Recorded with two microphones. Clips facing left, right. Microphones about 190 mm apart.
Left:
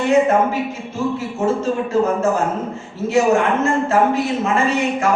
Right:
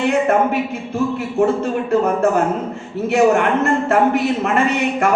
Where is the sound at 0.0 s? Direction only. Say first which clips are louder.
Left 1 dB; 60° right (ahead or behind).